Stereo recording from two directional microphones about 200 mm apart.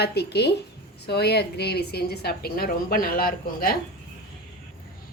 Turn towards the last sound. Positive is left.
turn(degrees=45)  # may be behind; listen again after turning